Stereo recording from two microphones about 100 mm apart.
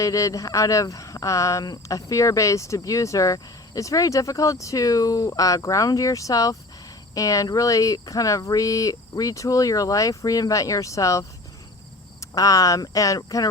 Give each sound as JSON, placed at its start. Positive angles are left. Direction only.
{"t": 0.0, "sound": "speech", "side_deg": 35}
{"t": 12.3, "sound": "speech", "side_deg": 35}